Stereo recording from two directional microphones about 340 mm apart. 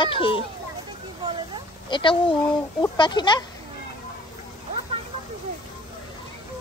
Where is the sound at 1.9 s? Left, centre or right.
Centre.